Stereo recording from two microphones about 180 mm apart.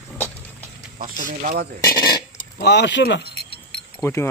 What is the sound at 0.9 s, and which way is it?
Speech, 45° right (ahead or behind).